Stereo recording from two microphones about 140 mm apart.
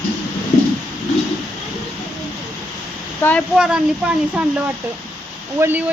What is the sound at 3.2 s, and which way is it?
Speech, 10° left (ahead or behind).